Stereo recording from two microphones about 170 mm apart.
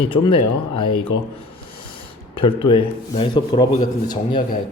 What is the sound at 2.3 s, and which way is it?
A man's voice, 30° left (ahead or behind).